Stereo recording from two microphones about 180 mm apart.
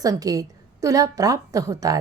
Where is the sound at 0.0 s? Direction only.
20° right (ahead or behind).